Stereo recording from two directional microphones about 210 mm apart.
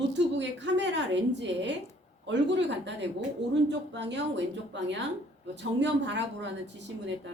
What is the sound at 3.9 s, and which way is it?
A woman's voice, 55° right (ahead or behind).